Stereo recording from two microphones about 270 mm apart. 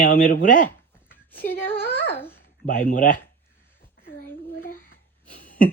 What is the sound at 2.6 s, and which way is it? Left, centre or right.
Speech, left.